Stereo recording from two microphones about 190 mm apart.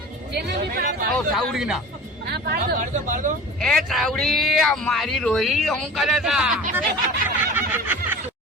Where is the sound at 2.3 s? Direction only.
55° right (ahead or behind).